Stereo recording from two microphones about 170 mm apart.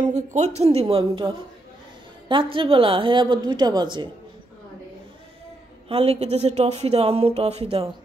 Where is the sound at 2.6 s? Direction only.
30° right (ahead or behind).